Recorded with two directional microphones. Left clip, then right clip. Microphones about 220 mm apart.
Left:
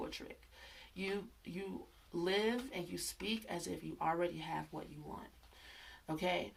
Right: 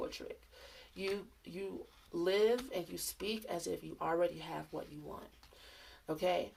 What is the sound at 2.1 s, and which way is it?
Speech, 25° right (ahead or behind).